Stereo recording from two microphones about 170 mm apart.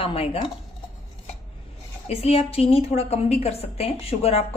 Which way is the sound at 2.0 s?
35° left (ahead or behind).